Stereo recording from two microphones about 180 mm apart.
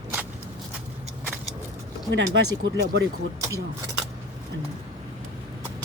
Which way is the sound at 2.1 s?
85° right.